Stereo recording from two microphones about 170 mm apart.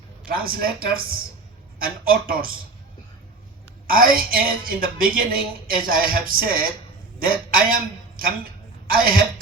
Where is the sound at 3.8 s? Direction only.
60° right (ahead or behind).